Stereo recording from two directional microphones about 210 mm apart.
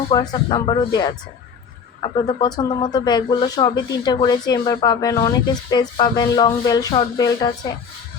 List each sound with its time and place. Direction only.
0.1 s speech: 20° left (ahead or behind)